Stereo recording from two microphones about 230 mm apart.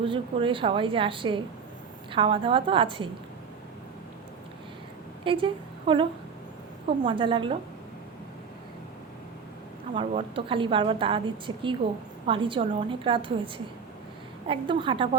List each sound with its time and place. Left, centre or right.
0.0 s a woman's voice: right
5.2 s a woman's voice: right
9.9 s a woman's voice: right